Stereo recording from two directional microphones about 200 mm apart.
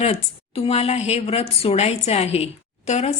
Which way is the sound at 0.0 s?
30° left (ahead or behind).